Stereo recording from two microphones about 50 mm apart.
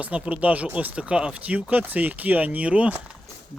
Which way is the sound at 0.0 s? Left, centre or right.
Right.